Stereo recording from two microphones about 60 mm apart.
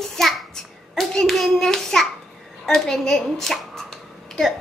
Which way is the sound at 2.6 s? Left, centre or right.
Centre.